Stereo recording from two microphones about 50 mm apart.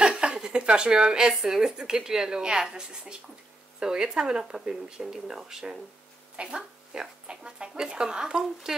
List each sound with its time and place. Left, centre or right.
0.0 s speech: centre